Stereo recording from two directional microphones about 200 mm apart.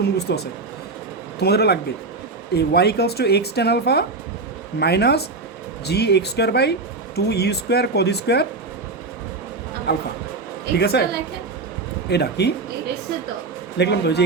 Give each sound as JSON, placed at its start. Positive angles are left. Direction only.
{"t": 0.0, "sound": "speech", "side_deg": 55}
{"t": 9.9, "sound": "speech", "side_deg": 55}
{"t": 12.0, "sound": "speech", "side_deg": 55}
{"t": 13.7, "sound": "speech", "side_deg": 55}